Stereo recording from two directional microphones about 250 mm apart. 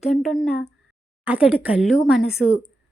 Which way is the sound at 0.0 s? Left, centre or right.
Centre.